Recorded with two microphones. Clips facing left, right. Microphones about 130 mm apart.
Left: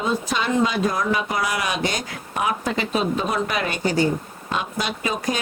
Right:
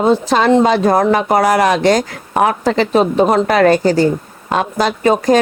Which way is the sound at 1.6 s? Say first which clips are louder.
Right 13 dB; 90° right.